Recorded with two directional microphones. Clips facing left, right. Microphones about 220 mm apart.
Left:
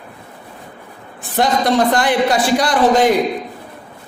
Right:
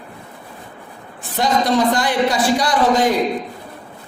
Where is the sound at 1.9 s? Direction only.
55° left (ahead or behind).